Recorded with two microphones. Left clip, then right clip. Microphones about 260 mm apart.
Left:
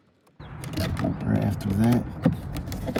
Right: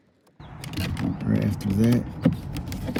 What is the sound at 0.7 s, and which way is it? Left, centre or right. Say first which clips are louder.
Vehicle: left 2 dB; centre.